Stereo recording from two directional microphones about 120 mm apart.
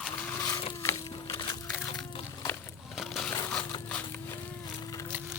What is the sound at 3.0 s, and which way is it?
Crushing, centre (ahead or behind).